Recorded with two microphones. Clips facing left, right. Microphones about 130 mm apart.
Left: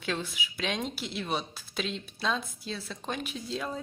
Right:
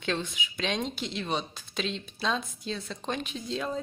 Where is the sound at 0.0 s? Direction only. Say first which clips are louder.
Right 2 dB; 5° left (ahead or behind).